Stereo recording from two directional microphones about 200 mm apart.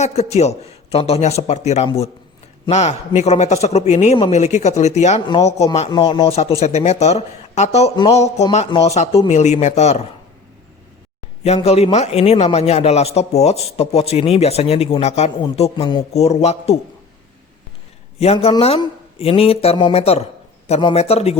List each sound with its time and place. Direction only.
0.0 s a man's voice: 35° left (ahead or behind)
8.7 s a man's voice: 30° left (ahead or behind)
11.4 s a man's voice: 30° left (ahead or behind)
18.2 s a man's voice: 30° left (ahead or behind)